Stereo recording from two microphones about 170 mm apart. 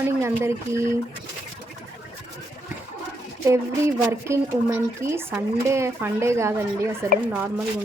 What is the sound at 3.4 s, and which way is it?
Speech, 15° right (ahead or behind).